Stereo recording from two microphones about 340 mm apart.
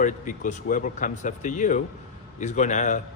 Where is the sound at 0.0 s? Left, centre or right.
Left.